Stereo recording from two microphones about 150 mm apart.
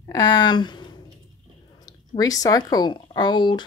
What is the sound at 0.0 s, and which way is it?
Speech, 25° left (ahead or behind).